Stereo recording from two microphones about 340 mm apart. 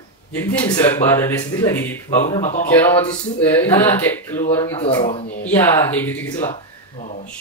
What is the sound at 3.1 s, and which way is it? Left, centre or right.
Speech, centre.